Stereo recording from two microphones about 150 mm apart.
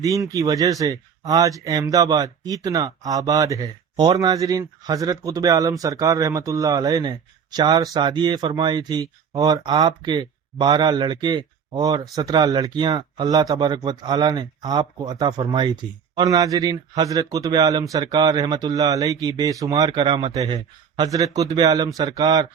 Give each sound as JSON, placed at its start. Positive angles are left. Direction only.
{"t": 0.0, "sound": "speech", "side_deg": -20}